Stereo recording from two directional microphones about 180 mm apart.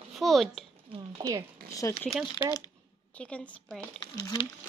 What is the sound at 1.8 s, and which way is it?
Speech, 15° left (ahead or behind).